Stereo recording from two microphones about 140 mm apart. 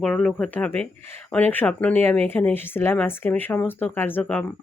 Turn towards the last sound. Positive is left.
turn(degrees=10)  # may be behind; listen again after turning